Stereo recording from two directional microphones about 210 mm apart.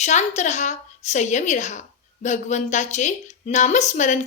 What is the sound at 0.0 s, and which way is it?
A woman's voice, 35° left (ahead or behind).